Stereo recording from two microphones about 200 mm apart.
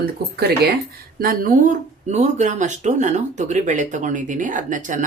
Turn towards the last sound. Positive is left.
turn(degrees=-40)  # may be behind; listen again after turning